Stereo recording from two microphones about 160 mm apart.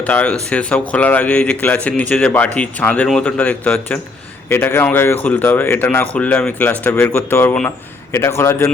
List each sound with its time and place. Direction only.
0.0 s speech: 10° left (ahead or behind)